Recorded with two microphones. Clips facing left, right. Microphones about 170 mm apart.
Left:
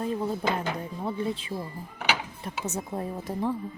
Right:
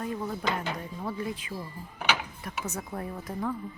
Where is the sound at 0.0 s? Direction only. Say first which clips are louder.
Left 4 dB; 25° left (ahead or behind).